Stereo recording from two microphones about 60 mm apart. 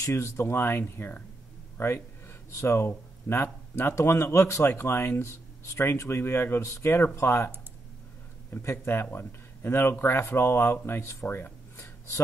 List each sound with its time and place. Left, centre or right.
0.1 s speech: left
1.8 s a sound: left
2.5 s speech: left
3.3 s speech: left
6.6 s speech: left
11.2 s a sound: left